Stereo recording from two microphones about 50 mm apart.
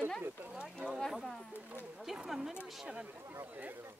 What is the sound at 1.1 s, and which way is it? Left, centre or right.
Speech, centre.